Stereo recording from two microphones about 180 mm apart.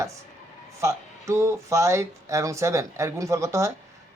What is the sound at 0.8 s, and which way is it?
Speech, 15° right (ahead or behind).